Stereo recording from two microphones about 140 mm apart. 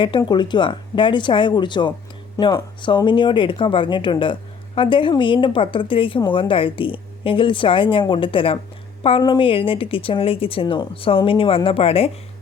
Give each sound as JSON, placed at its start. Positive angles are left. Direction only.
{"t": 0.0, "sound": "speech", "side_deg": 35}